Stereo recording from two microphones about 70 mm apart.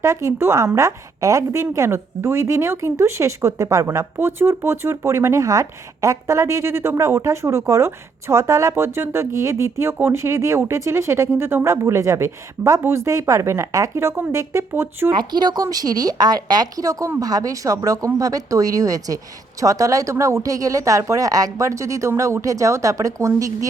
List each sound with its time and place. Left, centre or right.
0.0 s a woman's voice: right
15.2 s speech: right
15.6 s a woman's voice: right